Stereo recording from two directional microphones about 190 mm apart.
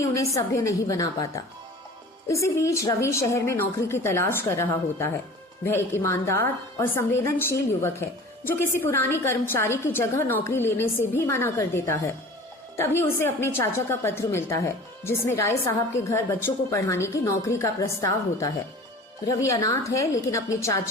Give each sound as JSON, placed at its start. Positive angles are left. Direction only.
{"t": 0.1, "sound": "a woman's voice", "side_deg": 15}